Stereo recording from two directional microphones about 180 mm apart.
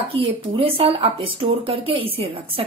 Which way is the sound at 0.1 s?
30° right (ahead or behind).